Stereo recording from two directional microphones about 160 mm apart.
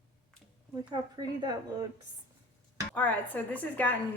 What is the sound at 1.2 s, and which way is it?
Speech, 25° right (ahead or behind).